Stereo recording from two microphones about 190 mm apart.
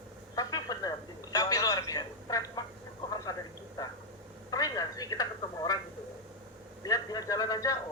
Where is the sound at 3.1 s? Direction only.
20° left (ahead or behind).